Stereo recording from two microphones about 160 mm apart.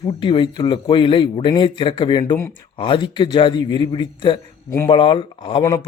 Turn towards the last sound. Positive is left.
turn(degrees=35)  # may be behind; listen again after turning